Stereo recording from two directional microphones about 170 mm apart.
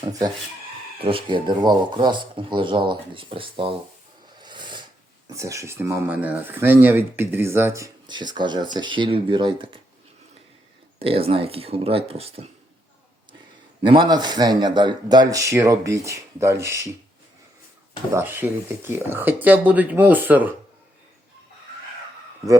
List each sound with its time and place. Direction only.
0.9 s speech: 30° right (ahead or behind)
4.4 s a sound: 25° right (ahead or behind)
5.3 s speech: 20° right (ahead or behind)
11.0 s speech: 35° right (ahead or behind)
13.8 s speech: 30° right (ahead or behind)
18.1 s speech: 15° right (ahead or behind)